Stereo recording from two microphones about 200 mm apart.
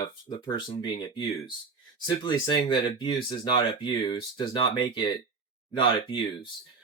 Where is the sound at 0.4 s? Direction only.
20° left (ahead or behind).